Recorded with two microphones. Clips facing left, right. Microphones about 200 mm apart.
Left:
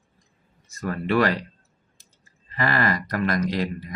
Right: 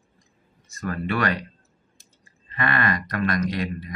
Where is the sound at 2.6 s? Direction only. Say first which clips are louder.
Left 1 dB; 30° left (ahead or behind).